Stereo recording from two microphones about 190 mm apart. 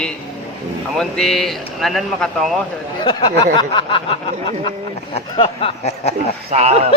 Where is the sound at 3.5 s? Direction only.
25° left (ahead or behind).